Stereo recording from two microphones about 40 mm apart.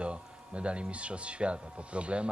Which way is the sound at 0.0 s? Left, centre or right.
Right.